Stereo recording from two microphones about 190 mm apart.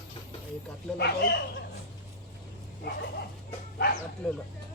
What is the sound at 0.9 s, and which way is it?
Speech, 60° left (ahead or behind).